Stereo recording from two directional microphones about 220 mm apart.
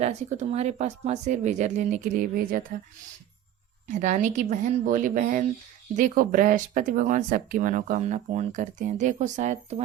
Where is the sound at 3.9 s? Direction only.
35° right (ahead or behind).